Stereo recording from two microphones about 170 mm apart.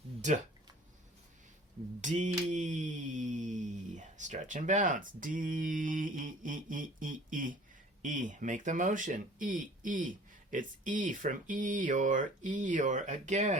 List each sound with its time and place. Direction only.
2.0 s speech: 45° right (ahead or behind)